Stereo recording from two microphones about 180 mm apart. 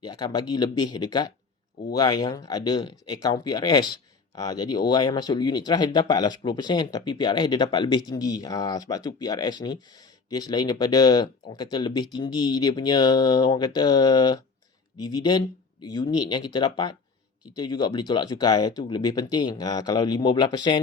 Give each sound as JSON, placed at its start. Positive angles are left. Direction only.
{"t": 0.0, "sound": "speech", "side_deg": 20}